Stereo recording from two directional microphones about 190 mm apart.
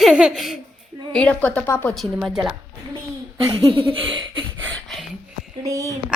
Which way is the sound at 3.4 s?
25° right (ahead or behind).